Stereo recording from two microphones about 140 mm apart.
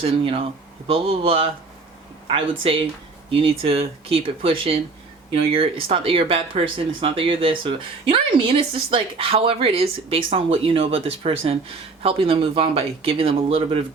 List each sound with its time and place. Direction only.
0.0 s speech: 40° right (ahead or behind)